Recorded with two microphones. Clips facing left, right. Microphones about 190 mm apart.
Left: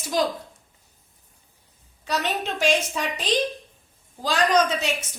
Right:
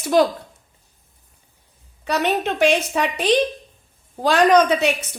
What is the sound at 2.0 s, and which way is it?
A woman's voice, 60° right (ahead or behind).